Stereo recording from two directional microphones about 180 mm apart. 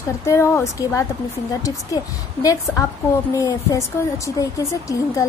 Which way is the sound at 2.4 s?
20° left (ahead or behind).